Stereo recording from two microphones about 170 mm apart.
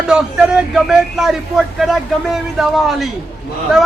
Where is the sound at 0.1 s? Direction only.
5° right (ahead or behind).